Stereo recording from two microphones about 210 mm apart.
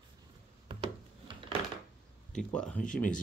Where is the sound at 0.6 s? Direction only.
25° right (ahead or behind).